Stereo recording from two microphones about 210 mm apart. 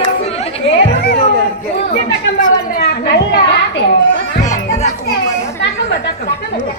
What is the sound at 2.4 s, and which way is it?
Children playing, 40° left (ahead or behind).